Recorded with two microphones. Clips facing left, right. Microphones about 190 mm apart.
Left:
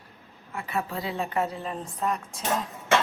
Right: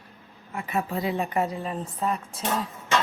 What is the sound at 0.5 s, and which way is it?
A woman's voice, 15° right (ahead or behind).